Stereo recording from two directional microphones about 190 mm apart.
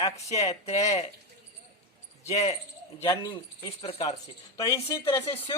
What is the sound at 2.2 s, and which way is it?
Speech, 35° left (ahead or behind).